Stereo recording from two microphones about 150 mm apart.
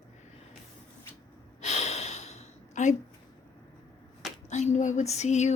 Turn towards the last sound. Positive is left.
turn(degrees=50)  # may be behind; listen again after turning